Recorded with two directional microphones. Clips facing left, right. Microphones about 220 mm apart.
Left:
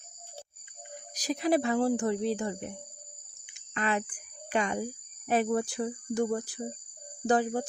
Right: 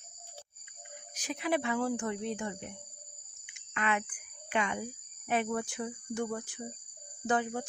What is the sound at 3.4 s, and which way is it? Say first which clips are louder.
Cricket: left 2 dB; 35° left (ahead or behind).